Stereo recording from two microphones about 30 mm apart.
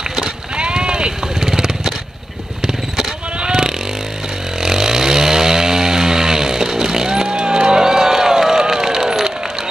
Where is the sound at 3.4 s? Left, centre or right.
Right.